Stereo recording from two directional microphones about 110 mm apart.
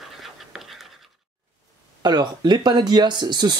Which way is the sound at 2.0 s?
40° right (ahead or behind).